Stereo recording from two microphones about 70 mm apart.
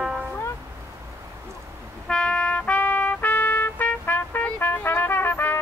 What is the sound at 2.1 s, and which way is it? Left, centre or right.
Trumpet, centre.